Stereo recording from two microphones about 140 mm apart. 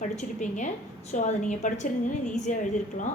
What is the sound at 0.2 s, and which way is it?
A woman's voice, 60° left (ahead or behind).